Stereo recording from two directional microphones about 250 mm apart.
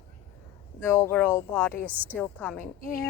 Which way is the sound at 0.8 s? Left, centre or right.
Centre.